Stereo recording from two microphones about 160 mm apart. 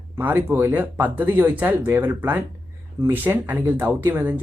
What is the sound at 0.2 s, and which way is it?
Speech, 15° right (ahead or behind).